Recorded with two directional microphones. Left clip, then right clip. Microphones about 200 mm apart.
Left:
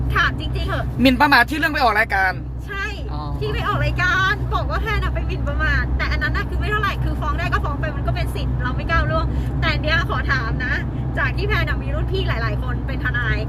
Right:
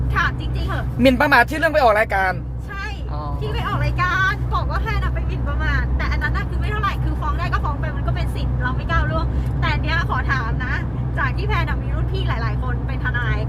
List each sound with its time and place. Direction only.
0.1 s speech: 5° left (ahead or behind)
1.0 s speech: 20° right (ahead or behind)
3.6 s speech: 5° left (ahead or behind)
8.6 s speech: 10° left (ahead or behind)